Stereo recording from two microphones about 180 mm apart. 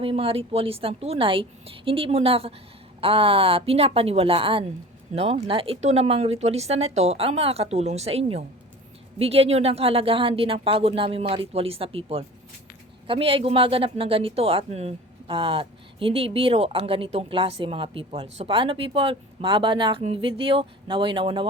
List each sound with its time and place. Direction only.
0.0 s speech: 30° right (ahead or behind)